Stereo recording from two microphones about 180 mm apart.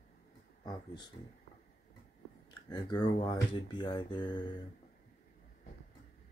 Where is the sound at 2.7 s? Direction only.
25° left (ahead or behind).